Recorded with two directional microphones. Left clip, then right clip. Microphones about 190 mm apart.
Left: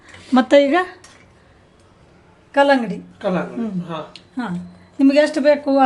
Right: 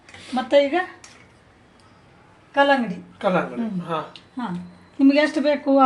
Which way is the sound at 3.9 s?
5° right (ahead or behind).